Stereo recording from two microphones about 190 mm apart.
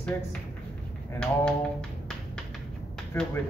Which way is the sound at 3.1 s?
10° left (ahead or behind).